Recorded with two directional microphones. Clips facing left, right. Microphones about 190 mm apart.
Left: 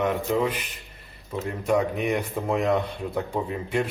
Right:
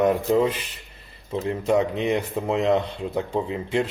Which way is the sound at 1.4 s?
25° right (ahead or behind).